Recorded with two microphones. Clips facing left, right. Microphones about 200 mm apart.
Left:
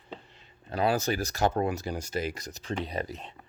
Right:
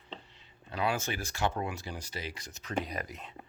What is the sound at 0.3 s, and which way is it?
Speech, 40° left (ahead or behind).